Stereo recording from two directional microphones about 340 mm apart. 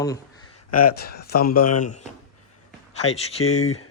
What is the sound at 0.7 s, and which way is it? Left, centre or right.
Speech, left.